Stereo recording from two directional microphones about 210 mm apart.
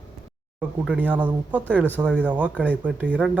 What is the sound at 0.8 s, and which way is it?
Speech, 5° right (ahead or behind).